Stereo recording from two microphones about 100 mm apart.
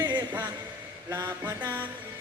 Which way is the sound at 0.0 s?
45° right (ahead or behind).